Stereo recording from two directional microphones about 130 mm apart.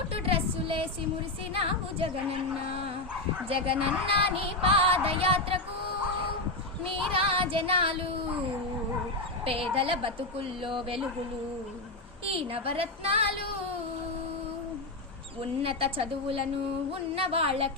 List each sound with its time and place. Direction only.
0.1 s music: 45° right (ahead or behind)
1.5 s female singing: 45° right (ahead or behind)
6.8 s child singing: 45° right (ahead or behind)
9.4 s female singing: 45° right (ahead or behind)
12.3 s female singing: 45° right (ahead or behind)
15.4 s female singing: 45° right (ahead or behind)